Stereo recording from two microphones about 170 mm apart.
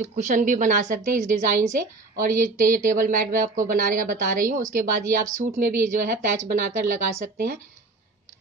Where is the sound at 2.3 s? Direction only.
50° right (ahead or behind).